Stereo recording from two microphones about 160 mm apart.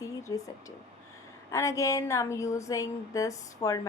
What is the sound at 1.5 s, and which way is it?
A woman's voice, 20° left (ahead or behind).